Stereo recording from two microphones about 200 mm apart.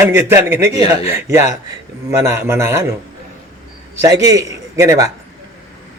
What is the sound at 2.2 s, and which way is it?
Speech, 15° right (ahead or behind).